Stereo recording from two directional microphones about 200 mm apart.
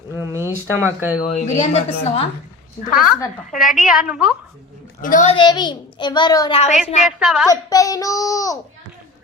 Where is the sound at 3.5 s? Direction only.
40° left (ahead or behind).